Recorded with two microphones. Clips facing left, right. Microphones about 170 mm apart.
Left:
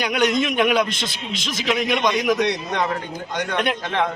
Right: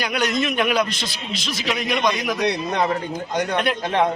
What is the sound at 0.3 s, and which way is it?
A man's voice, 20° left (ahead or behind).